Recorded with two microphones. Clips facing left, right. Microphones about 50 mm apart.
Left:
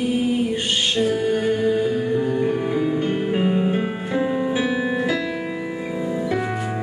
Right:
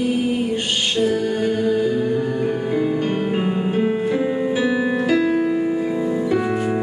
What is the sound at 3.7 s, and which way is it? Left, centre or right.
Music, centre.